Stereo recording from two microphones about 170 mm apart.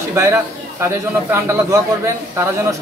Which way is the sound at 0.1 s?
15° right (ahead or behind).